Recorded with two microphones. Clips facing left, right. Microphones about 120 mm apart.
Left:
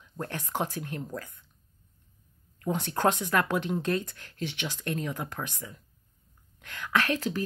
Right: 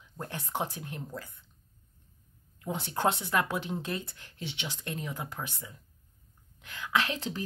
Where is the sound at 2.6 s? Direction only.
15° right (ahead or behind).